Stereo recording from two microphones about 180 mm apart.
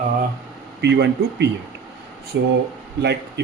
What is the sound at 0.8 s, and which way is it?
Speech, 70° right (ahead or behind).